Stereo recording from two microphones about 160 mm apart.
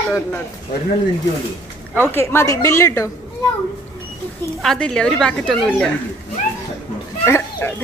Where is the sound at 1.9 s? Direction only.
15° left (ahead or behind).